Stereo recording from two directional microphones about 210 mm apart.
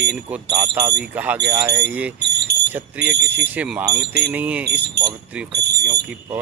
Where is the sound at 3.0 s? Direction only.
55° right (ahead or behind).